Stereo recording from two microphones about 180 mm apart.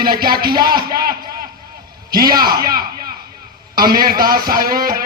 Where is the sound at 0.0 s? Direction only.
55° right (ahead or behind).